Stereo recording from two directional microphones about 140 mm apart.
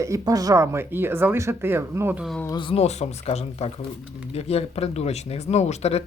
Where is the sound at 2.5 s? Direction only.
35° left (ahead or behind).